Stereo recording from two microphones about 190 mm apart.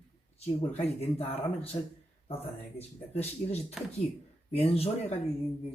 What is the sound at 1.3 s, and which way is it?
Speech, 30° left (ahead or behind).